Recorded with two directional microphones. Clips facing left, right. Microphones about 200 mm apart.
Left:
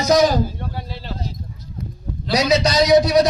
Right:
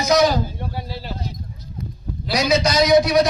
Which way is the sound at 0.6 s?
10° right (ahead or behind).